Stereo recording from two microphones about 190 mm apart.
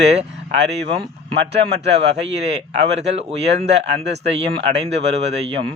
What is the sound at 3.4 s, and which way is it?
Speech, 65° right (ahead or behind).